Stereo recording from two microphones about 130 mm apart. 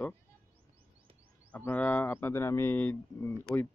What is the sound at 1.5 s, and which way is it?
Speech, 10° left (ahead or behind).